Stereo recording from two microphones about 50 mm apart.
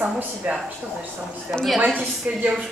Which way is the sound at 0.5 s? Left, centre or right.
Right.